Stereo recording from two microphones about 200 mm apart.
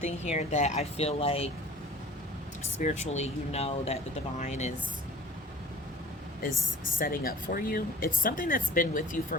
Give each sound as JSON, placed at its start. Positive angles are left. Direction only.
{"t": 0.0, "sound": "speech", "side_deg": 35}
{"t": 2.7, "sound": "speech", "side_deg": 35}
{"t": 7.0, "sound": "speech", "side_deg": 45}